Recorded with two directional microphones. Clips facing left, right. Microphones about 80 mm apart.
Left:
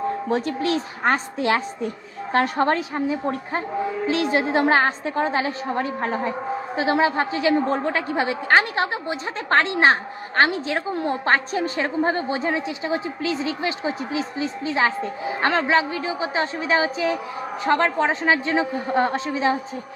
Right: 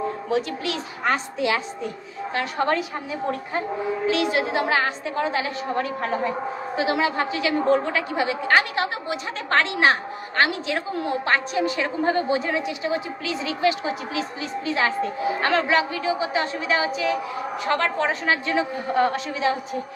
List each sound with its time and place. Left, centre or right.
0.3 s a woman's voice: left